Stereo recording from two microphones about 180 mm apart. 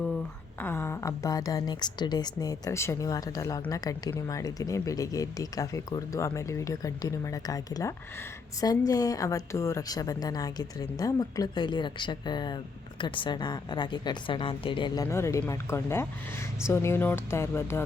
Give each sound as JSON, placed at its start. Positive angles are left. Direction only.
{"t": 0.6, "sound": "a woman's voice", "side_deg": 10}